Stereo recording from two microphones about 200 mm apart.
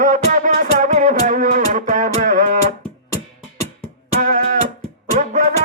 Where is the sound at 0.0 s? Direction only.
40° right (ahead or behind).